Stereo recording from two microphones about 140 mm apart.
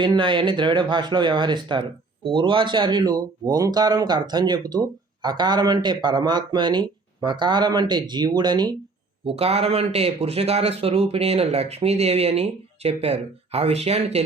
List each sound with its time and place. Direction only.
0.0 s speech: 35° right (ahead or behind)
9.2 s speech: 45° right (ahead or behind)